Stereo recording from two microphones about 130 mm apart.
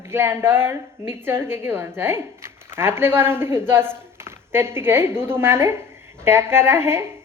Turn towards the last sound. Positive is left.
turn(degrees=-20)  # may be behind; listen again after turning